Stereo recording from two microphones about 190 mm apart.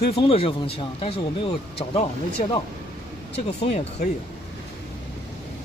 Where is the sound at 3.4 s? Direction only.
35° left (ahead or behind).